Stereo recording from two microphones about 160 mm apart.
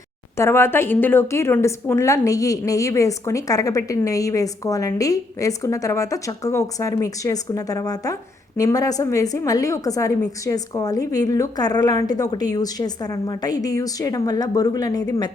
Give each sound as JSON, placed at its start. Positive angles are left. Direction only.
{"t": 0.3, "sound": "a woman's voice", "side_deg": 15}